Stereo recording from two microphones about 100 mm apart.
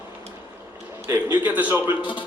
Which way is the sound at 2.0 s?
55° left (ahead or behind).